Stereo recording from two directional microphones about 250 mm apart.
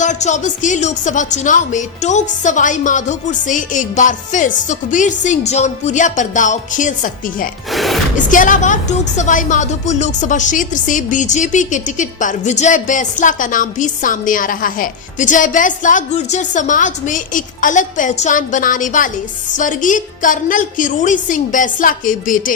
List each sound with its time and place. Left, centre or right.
0.0 s a woman's voice: left
7.7 s gasp: centre
8.1 s a woman's voice: left